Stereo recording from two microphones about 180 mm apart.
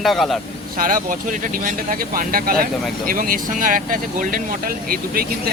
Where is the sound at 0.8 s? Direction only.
50° right (ahead or behind).